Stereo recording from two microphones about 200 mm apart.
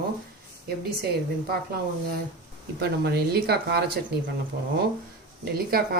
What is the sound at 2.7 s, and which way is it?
Speech, 50° right (ahead or behind).